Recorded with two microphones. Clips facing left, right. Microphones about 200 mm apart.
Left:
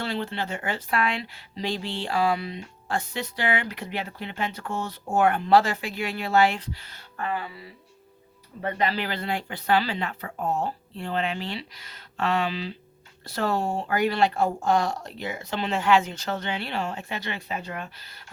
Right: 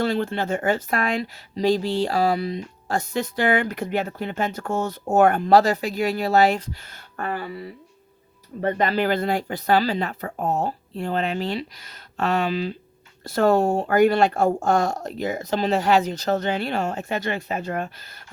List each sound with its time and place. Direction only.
0.0 s speech: 45° right (ahead or behind)